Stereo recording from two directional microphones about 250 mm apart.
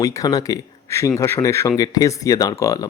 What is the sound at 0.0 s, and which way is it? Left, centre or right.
Speech, centre.